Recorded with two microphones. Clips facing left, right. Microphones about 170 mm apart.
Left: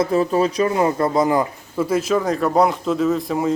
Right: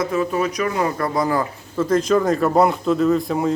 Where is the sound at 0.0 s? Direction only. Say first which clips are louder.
Left 3 dB; 30° left (ahead or behind).